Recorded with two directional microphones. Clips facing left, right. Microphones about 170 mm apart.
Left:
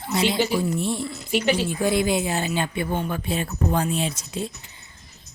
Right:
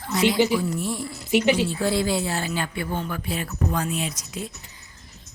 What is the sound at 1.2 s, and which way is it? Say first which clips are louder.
Speech: right 3 dB; 20° right (ahead or behind).